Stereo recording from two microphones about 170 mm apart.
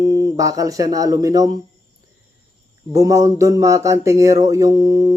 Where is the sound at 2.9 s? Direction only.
20° right (ahead or behind).